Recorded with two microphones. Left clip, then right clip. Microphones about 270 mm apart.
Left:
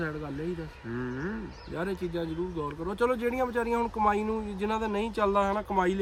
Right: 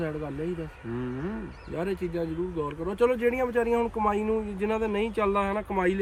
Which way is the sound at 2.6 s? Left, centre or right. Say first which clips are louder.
Right 4 dB; centre.